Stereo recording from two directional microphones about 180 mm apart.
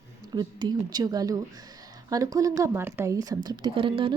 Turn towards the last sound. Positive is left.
turn(degrees=-30)  # may be behind; listen again after turning